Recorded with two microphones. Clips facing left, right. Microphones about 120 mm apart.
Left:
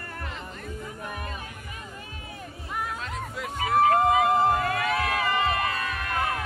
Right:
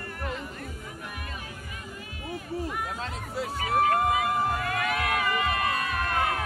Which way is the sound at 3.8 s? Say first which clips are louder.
Left 6 dB; 30° left (ahead or behind).